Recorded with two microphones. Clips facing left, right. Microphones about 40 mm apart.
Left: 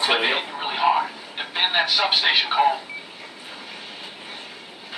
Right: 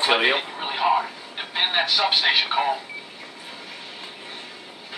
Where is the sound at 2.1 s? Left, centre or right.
Centre.